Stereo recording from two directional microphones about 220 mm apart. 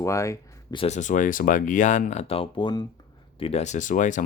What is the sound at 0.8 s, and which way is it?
Speech, 35° left (ahead or behind).